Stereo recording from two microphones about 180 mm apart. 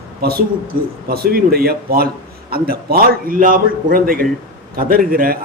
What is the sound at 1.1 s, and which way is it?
A man's voice, 60° right (ahead or behind).